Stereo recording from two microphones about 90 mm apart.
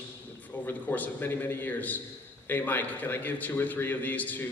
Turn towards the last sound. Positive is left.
turn(degrees=20)  # may be behind; listen again after turning